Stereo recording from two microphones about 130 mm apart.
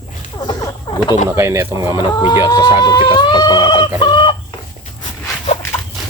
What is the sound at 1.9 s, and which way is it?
Speech, 35° left (ahead or behind).